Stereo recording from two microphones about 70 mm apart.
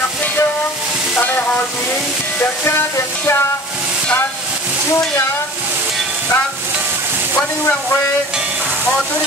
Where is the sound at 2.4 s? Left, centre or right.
Left.